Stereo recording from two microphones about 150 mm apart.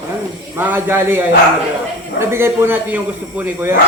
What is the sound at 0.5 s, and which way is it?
A woman's voice, 15° right (ahead or behind).